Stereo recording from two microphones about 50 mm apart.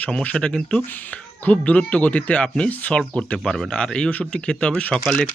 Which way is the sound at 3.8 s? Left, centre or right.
Centre.